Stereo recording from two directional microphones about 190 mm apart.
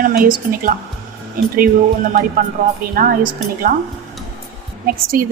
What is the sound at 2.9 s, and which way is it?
Speech, 50° right (ahead or behind).